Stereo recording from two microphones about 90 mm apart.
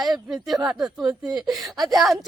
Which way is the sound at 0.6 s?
15° right (ahead or behind).